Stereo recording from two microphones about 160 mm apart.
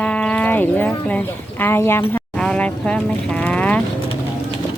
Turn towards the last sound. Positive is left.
turn(degrees=10)  # may be behind; listen again after turning